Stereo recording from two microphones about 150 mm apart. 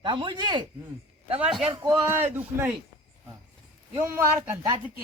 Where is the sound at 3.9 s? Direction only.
15° right (ahead or behind).